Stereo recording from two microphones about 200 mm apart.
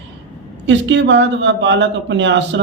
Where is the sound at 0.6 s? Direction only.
65° right (ahead or behind).